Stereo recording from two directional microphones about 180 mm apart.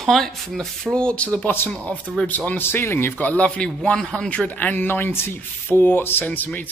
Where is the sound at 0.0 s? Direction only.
Centre (ahead or behind).